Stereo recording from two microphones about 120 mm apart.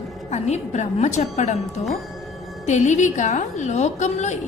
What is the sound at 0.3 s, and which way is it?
A woman's voice, 70° left (ahead or behind).